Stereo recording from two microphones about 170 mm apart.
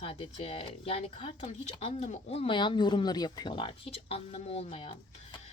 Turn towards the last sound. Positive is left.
turn(degrees=35)  # may be behind; listen again after turning